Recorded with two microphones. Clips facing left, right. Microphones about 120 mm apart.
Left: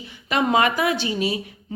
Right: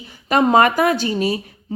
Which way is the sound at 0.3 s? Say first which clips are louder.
Right 5 dB; 45° right (ahead or behind).